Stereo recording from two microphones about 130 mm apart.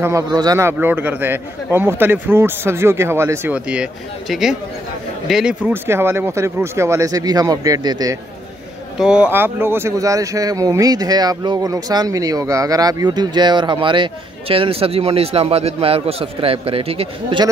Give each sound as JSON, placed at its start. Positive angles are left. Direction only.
{"t": 0.3, "sound": "speech", "side_deg": -30}
{"t": 0.6, "sound": "a man's voice", "side_deg": -15}
{"t": 3.5, "sound": "a man's voice", "side_deg": -10}
{"t": 5.7, "sound": "speech", "side_deg": -15}
{"t": 9.0, "sound": "speech", "side_deg": -5}
{"t": 9.3, "sound": "speech", "side_deg": -15}